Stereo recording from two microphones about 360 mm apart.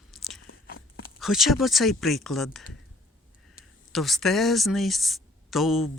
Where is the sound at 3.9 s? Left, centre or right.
Centre.